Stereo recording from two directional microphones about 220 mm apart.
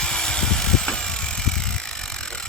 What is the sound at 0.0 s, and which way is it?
Vehicle, 5° left (ahead or behind).